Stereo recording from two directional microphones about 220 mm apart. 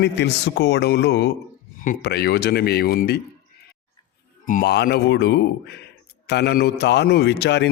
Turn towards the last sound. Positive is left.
turn(degrees=50)  # may be behind; listen again after turning